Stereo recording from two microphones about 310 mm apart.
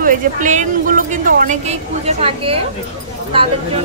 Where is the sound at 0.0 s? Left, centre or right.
Right.